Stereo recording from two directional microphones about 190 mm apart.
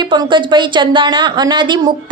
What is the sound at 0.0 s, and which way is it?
A woman's voice, 25° right (ahead or behind).